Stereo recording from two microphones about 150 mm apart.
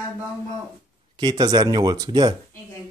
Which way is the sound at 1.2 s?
25° right (ahead or behind).